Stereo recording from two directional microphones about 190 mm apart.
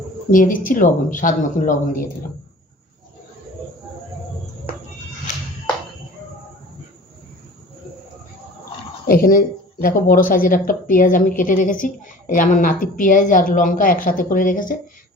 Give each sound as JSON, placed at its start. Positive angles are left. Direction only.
{"t": 0.3, "sound": "a woman's voice", "side_deg": 45}
{"t": 9.0, "sound": "a woman's voice", "side_deg": 50}